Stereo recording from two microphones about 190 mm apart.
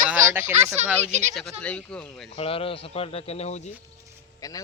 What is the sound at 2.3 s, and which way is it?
Speech, 30° left (ahead or behind).